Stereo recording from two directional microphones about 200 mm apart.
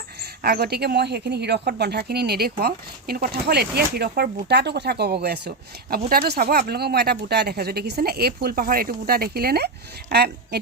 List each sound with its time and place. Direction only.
0.2 s speech: 50° right (ahead or behind)